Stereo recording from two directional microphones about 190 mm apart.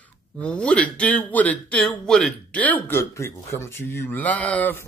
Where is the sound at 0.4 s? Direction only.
5° left (ahead or behind).